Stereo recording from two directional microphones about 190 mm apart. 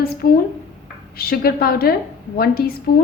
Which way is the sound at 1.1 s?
55° left (ahead or behind).